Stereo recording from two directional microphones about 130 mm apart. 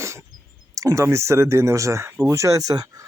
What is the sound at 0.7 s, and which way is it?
Speech, 25° right (ahead or behind).